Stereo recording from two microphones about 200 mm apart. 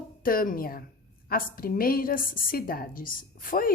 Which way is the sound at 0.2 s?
45° left (ahead or behind).